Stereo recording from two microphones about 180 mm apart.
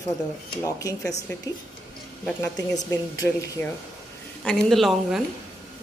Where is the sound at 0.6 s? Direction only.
20° left (ahead or behind).